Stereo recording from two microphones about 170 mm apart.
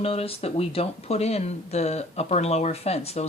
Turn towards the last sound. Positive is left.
turn(degrees=35)  # may be behind; listen again after turning